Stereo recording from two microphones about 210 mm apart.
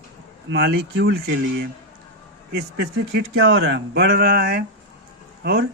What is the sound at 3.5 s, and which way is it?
Speech, 55° right (ahead or behind).